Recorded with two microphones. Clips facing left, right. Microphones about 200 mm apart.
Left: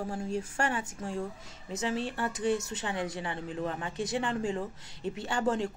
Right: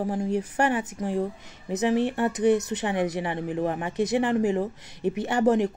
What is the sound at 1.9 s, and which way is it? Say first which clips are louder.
Speech: right 9 dB; 65° right (ahead or behind).